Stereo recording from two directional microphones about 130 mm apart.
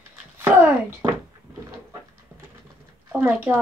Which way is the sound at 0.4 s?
15° right (ahead or behind).